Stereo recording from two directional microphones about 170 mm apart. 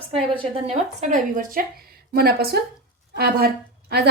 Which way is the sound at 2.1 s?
65° right (ahead or behind).